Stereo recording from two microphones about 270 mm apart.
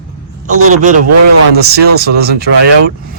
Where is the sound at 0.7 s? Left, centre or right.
Right.